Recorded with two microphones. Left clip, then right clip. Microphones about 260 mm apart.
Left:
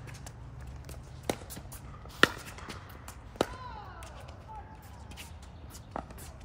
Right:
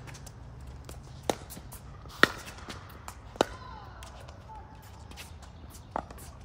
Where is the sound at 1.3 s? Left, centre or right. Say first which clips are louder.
Right 3 dB; centre.